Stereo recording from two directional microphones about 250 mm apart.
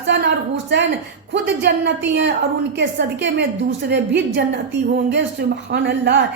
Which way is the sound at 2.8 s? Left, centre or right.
Right.